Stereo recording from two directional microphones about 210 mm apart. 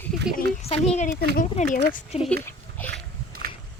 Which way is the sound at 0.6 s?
30° left (ahead or behind).